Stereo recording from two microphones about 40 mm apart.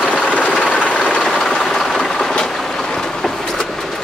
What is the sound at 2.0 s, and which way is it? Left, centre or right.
Train, centre.